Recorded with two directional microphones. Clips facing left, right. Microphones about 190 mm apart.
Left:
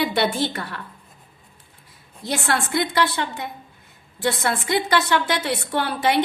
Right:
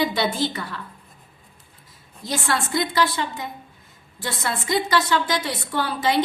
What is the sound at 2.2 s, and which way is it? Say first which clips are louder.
A woman's voice: left 1 dB; 65° left (ahead or behind).